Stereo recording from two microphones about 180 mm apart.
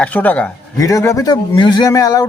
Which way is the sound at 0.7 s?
20° left (ahead or behind).